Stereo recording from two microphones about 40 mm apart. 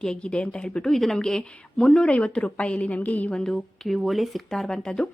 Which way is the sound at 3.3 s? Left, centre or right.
Centre.